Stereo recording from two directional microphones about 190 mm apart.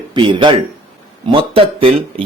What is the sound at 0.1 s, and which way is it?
Speech, 25° right (ahead or behind).